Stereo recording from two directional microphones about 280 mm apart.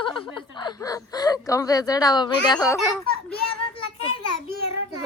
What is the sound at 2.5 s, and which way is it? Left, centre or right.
Speech, centre.